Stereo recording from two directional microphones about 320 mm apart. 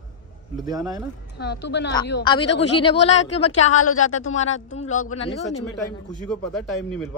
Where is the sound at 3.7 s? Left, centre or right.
Left.